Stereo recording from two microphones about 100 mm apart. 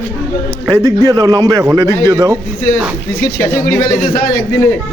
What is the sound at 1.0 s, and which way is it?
Speech, 40° right (ahead or behind).